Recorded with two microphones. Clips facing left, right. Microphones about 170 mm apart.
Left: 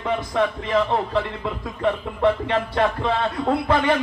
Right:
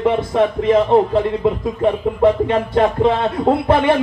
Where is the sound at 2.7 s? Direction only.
25° right (ahead or behind).